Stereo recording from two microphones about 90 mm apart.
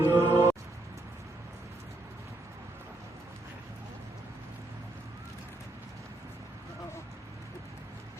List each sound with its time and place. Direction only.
0.0 s music: 25° right (ahead or behind)